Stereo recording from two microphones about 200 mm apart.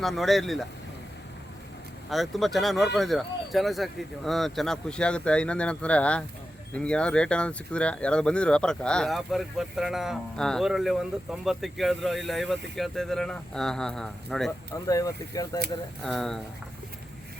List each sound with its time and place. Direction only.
0.0 s speech: centre (ahead or behind)
2.0 s speech: centre (ahead or behind)
14.8 s speech: 15° left (ahead or behind)
16.0 s speech: centre (ahead or behind)